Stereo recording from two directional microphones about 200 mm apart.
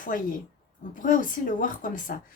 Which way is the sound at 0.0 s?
40° left (ahead or behind).